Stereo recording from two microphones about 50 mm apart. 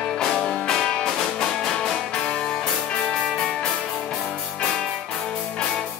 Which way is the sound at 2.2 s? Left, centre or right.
Left.